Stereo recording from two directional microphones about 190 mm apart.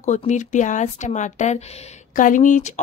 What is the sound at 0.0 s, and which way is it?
A woman's voice, 40° left (ahead or behind).